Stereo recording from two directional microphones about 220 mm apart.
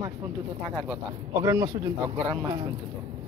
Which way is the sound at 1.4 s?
15° right (ahead or behind).